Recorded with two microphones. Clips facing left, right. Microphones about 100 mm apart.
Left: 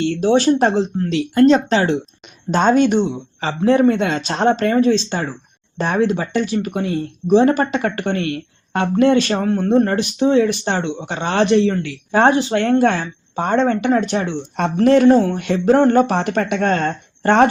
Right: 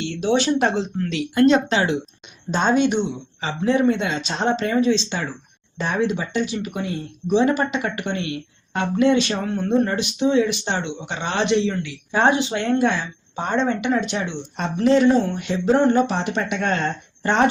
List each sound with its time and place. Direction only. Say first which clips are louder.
0.0 s speech: left 6 dB; 40° left (ahead or behind)
2.5 s a woman's voice: left 5 dB; 50° left (ahead or behind)
14.6 s a woman's voice: left 4 dB; 55° left (ahead or behind)